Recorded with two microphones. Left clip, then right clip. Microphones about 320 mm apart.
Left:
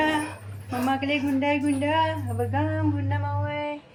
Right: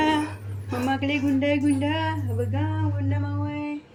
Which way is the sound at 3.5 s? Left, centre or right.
Right.